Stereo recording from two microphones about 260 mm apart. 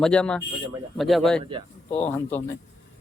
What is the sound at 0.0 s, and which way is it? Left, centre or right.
Speech, centre.